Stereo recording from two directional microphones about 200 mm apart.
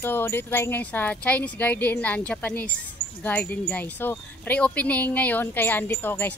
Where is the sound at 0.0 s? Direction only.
10° left (ahead or behind).